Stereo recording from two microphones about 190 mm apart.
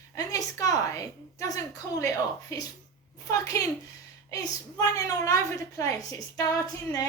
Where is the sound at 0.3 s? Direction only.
20° left (ahead or behind).